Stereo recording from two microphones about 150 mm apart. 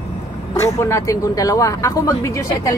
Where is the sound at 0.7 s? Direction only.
20° left (ahead or behind).